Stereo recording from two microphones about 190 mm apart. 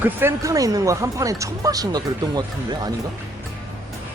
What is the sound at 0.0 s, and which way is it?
Speech, 10° right (ahead or behind).